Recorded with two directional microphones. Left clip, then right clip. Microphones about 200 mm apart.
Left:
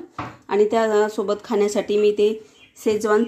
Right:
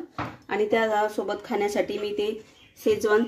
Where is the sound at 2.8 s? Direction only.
30° left (ahead or behind).